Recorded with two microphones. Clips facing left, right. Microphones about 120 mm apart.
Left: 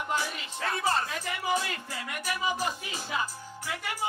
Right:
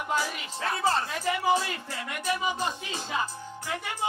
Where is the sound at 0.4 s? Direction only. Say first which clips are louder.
Right 3 dB; 25° right (ahead or behind).